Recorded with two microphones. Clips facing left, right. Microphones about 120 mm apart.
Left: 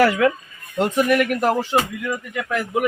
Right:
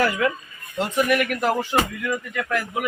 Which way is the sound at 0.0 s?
80° left.